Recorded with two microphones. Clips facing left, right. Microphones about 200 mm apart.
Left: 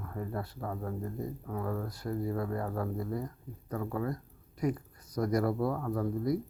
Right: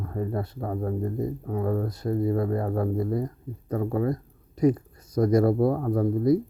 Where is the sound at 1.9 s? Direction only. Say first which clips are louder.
Right 8 dB; 20° right (ahead or behind).